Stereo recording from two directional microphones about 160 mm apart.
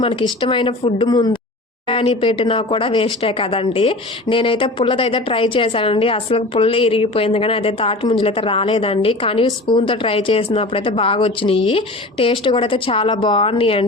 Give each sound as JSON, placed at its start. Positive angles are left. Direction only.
{"t": 0.0, "sound": "speech", "side_deg": 30}